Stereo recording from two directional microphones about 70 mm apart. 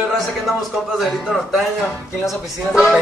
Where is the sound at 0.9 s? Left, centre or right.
Centre.